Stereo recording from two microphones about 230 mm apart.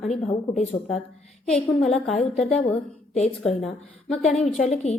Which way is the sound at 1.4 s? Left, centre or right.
Centre.